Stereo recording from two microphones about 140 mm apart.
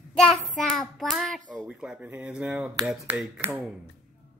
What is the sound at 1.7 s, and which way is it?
Speech, 5° right (ahead or behind).